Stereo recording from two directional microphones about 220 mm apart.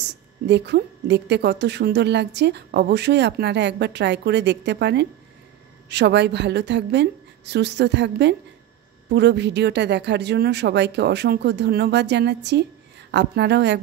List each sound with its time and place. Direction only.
0.5 s a woman's voice: 50° right (ahead or behind)